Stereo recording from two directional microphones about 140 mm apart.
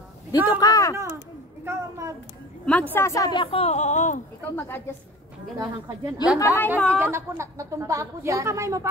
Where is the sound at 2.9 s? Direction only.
20° left (ahead or behind).